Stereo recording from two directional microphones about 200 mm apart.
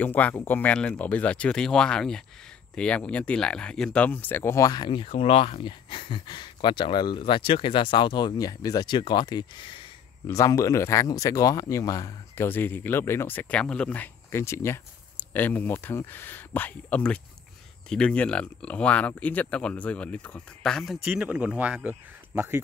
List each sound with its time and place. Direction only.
0.0 s speech: 10° left (ahead or behind); by 22.6 s 10° right (ahead or behind)